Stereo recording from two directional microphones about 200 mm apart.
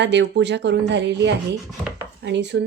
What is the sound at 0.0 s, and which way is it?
Speech, 60° right (ahead or behind).